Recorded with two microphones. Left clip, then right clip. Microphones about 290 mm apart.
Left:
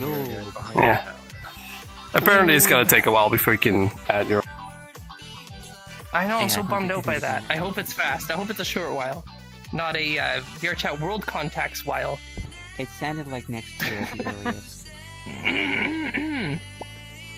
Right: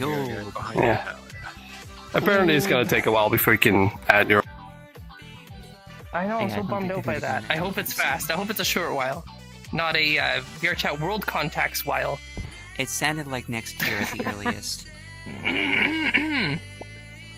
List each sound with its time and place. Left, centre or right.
0.1 s music: right
0.8 s speech: centre
2.1 s speech: centre
3.6 s speech: centre
4.0 s speech: right
6.1 s speech: left
6.7 s speech: left
7.3 s speech: centre
12.7 s speech: right
13.7 s speech: centre
15.3 s music: centre
15.7 s speech: centre